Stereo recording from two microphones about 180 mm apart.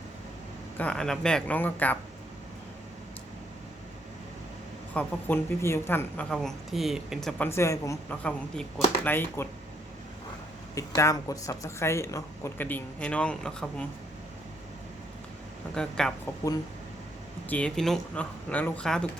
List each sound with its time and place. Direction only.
0.8 s speech: 5° left (ahead or behind)
4.9 s speech: 10° left (ahead or behind)
10.8 s speech: 20° left (ahead or behind)
15.7 s speech: 5° left (ahead or behind)
17.5 s speech: 5° left (ahead or behind)